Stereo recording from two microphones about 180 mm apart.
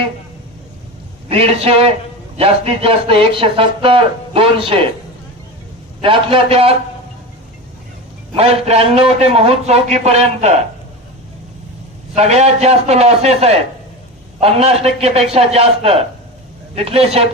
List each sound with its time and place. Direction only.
1.3 s a man's voice: 35° right (ahead or behind)
6.0 s a man's voice: 30° right (ahead or behind)
8.4 s a man's voice: 35° right (ahead or behind)
12.1 s a man's voice: 35° right (ahead or behind)